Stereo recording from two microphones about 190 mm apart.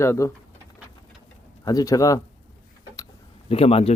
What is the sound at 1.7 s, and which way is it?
Speech, 20° left (ahead or behind).